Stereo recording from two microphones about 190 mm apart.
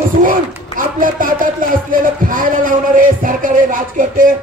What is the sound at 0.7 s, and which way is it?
Speech, 45° right (ahead or behind).